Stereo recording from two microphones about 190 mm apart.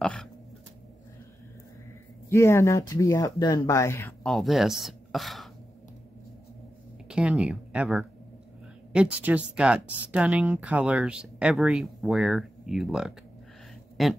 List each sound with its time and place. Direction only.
0.0 s speech: 5° left (ahead or behind)
2.2 s speech: 15° left (ahead or behind)
4.2 s speech: centre (ahead or behind)
7.1 s speech: 5° right (ahead or behind)